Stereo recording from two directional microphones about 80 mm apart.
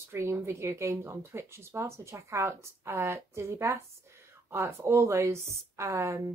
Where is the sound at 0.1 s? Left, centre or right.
Right.